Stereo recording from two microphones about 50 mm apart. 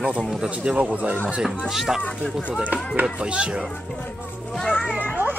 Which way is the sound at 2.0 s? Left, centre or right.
Left.